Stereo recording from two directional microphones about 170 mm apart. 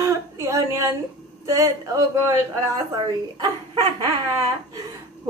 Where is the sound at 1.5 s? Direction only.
20° right (ahead or behind).